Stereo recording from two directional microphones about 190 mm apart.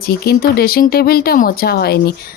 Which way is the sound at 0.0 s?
55° left (ahead or behind).